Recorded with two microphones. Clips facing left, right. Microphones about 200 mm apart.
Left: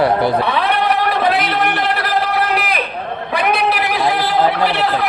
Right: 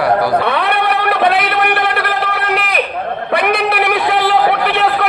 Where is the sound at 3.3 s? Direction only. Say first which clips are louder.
Right 2 dB; 65° right (ahead or behind).